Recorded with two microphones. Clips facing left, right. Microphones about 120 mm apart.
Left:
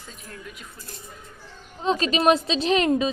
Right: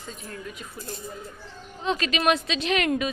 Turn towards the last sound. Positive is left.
turn(degrees=25)  # may be behind; listen again after turning